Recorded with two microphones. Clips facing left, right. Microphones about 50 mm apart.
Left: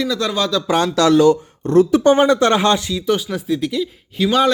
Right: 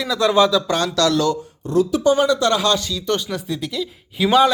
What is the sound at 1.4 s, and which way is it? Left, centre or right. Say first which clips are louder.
Speech: left 5 dB; left.